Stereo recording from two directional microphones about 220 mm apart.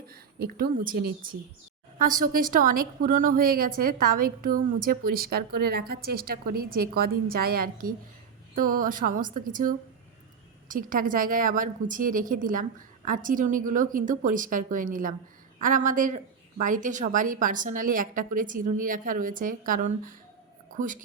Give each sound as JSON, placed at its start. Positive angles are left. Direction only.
{"t": 0.1, "sound": "a woman's voice", "side_deg": -45}